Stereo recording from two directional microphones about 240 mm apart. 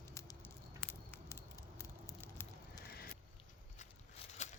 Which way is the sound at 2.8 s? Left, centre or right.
Left.